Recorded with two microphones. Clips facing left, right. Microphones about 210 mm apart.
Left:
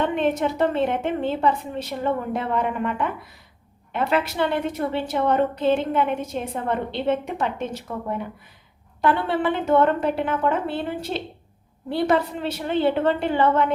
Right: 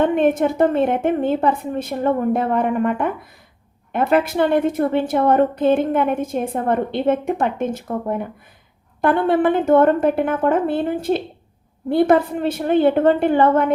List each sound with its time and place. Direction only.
0.0 s a woman's voice: 50° right (ahead or behind)